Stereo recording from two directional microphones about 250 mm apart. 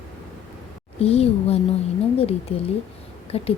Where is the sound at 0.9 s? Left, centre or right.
Left.